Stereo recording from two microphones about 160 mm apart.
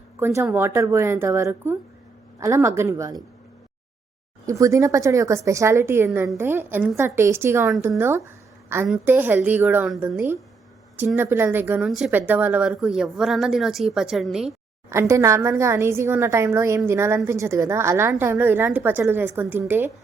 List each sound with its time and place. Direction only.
0.2 s a woman's voice: 20° right (ahead or behind)
4.4 s a woman's voice: 20° right (ahead or behind)
11.9 s speech: centre (ahead or behind)
14.8 s a woman's voice: 20° right (ahead or behind)